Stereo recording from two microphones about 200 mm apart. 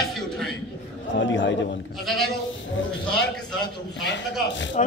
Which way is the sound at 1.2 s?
65° left (ahead or behind).